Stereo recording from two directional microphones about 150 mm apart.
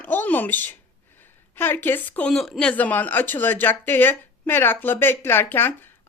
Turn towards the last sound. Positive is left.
turn(degrees=15)  # may be behind; listen again after turning